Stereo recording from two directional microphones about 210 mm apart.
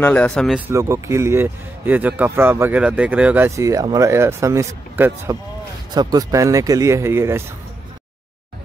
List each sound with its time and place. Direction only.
0.0 s speech: 5° left (ahead or behind)
0.7 s a man's voice: 15° right (ahead or behind)